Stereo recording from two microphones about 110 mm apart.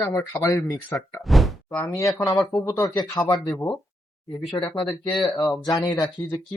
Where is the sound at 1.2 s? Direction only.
Centre (ahead or behind).